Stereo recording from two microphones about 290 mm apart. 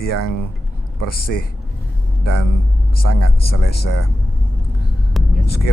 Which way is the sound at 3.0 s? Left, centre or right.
Left.